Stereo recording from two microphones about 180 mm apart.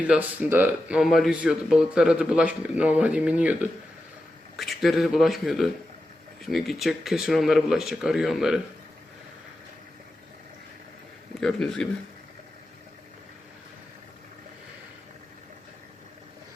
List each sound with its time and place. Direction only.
0.1 s speech: 10° right (ahead or behind)
11.3 s speech: 5° left (ahead or behind)